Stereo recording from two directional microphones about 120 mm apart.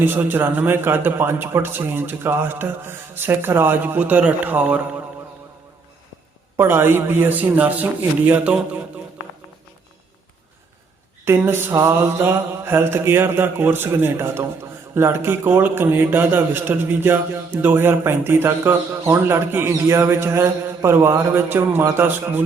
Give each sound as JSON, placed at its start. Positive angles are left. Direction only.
{"t": 0.0, "sound": "a man's voice", "side_deg": -15}
{"t": 6.6, "sound": "a man's voice", "side_deg": -20}
{"t": 11.3, "sound": "a man's voice", "side_deg": -20}